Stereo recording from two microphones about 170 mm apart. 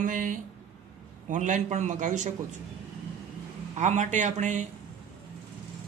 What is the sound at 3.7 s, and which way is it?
Speech, 45° right (ahead or behind).